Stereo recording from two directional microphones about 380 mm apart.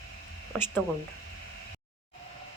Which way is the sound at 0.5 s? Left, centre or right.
Centre.